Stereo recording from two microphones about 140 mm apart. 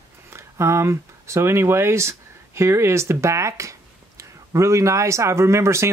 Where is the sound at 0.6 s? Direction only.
20° right (ahead or behind).